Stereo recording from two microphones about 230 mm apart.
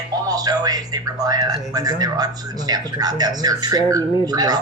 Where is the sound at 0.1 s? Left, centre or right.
Centre.